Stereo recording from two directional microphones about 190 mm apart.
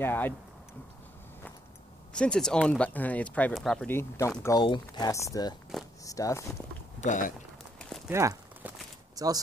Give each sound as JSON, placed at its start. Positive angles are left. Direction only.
{"t": 0.0, "sound": "speech", "side_deg": 10}
{"t": 2.1, "sound": "speech", "side_deg": 5}
{"t": 5.7, "sound": "speech", "side_deg": 0}
{"t": 6.0, "sound": "speech", "side_deg": 15}
{"t": 7.0, "sound": "speech", "side_deg": 45}
{"t": 8.1, "sound": "a sound", "side_deg": -15}
{"t": 9.1, "sound": "speech", "side_deg": -20}